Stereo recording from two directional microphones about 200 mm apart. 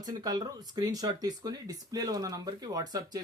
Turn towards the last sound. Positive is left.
turn(degrees=-20)  # may be behind; listen again after turning